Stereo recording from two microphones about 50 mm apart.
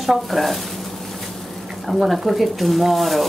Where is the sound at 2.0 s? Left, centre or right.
Centre.